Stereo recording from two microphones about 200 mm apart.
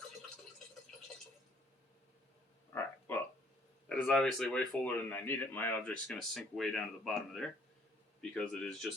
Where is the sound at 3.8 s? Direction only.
5° left (ahead or behind).